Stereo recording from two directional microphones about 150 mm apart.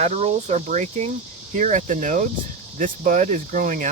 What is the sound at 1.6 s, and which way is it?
Speech, 55° right (ahead or behind).